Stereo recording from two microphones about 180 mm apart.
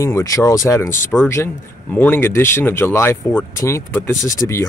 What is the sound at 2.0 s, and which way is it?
Speech, 10° left (ahead or behind).